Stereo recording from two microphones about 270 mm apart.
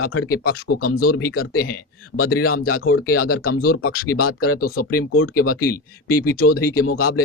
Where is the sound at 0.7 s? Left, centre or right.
Left.